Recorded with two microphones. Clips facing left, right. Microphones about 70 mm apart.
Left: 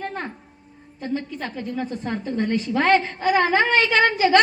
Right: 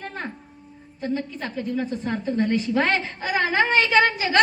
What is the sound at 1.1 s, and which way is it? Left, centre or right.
A woman's voice, left.